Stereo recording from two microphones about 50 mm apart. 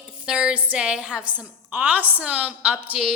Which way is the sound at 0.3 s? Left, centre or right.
Centre.